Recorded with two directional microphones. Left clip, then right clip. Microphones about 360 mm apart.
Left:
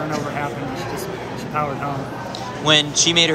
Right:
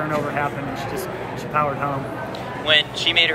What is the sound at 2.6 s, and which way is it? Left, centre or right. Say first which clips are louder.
Speech: left 2 dB; centre.